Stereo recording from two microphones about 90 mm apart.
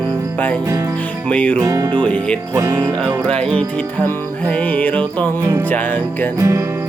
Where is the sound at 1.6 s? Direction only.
40° right (ahead or behind).